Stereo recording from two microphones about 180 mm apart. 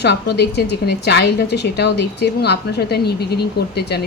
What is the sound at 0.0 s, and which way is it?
A woman's voice, 65° left (ahead or behind).